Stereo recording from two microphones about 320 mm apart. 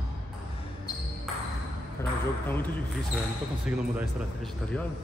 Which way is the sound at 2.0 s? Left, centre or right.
Centre.